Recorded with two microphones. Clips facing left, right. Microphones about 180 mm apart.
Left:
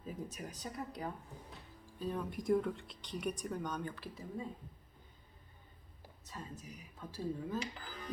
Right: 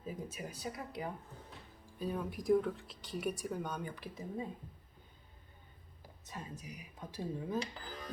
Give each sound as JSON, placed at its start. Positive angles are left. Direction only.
{"t": 0.0, "sound": "speech", "side_deg": -5}
{"t": 1.3, "sound": "music", "side_deg": 15}
{"t": 2.0, "sound": "speech", "side_deg": -10}
{"t": 6.2, "sound": "speech", "side_deg": -15}